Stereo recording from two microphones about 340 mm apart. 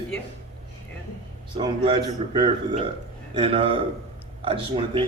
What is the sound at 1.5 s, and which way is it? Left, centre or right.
A man's voice, centre.